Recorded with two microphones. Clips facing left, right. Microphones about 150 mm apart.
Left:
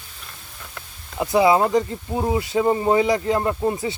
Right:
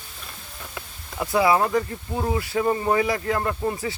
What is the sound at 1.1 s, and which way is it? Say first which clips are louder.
Speech: left 3 dB; 20° left (ahead or behind).